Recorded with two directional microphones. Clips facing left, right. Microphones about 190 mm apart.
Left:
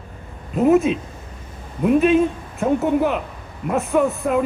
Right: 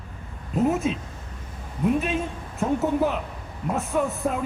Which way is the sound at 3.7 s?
60° left (ahead or behind).